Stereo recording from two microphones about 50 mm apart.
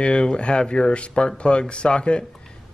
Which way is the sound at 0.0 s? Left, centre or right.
Centre.